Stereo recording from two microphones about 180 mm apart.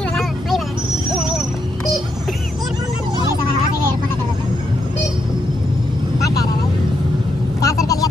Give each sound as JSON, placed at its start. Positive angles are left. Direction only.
{"t": 0.1, "sound": "vehicle", "side_deg": 0}
{"t": 7.6, "sound": "vehicle", "side_deg": 20}